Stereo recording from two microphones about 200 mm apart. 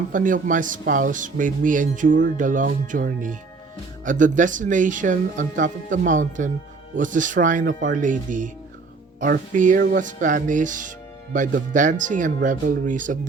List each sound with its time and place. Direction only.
0.1 s speech: 40° right (ahead or behind)
9.5 s speech: 40° right (ahead or behind)